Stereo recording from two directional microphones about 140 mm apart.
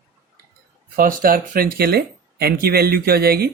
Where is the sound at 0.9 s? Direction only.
85° right.